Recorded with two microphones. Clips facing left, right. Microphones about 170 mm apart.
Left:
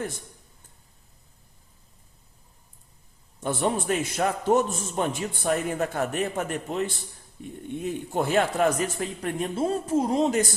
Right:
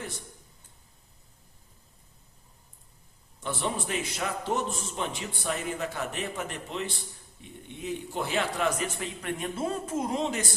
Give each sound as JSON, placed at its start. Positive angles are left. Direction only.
{"t": 3.4, "sound": "a man's voice", "side_deg": 50}